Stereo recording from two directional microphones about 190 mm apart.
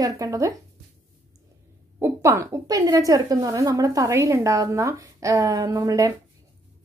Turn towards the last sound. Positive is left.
turn(degrees=-15)  # may be behind; listen again after turning